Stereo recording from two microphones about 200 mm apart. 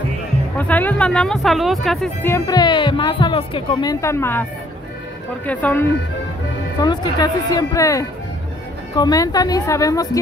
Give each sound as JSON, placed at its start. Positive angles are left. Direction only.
{"t": 0.6, "sound": "speech", "side_deg": 10}
{"t": 2.3, "sound": "speech", "side_deg": 20}
{"t": 5.5, "sound": "speech", "side_deg": 10}
{"t": 6.8, "sound": "speech", "side_deg": 20}